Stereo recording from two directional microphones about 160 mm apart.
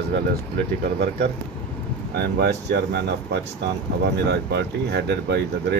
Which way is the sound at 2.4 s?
90° right.